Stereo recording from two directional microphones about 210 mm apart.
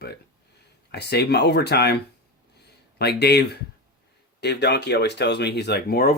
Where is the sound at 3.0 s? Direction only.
50° left (ahead or behind).